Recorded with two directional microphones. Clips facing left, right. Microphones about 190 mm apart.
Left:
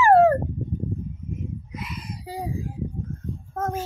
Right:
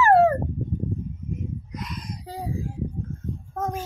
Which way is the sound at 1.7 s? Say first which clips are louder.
Even; 5° left (ahead or behind).